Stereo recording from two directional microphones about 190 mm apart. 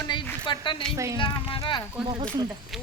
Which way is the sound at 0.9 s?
15° right (ahead or behind).